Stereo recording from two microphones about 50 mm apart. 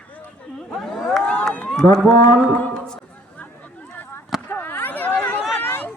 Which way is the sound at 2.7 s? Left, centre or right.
Centre.